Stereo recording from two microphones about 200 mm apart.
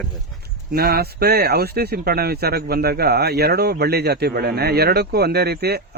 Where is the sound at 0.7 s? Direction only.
50° right (ahead or behind).